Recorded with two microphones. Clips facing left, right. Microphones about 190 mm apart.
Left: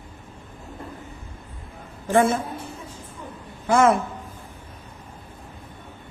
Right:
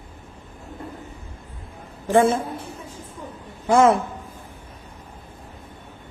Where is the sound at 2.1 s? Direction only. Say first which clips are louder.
Right 2 dB; 25° right (ahead or behind).